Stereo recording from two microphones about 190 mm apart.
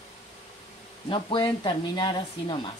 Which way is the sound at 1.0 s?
25° left (ahead or behind).